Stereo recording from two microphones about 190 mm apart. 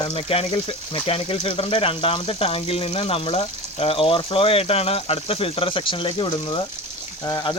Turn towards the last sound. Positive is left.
turn(degrees=20)  # may be behind; listen again after turning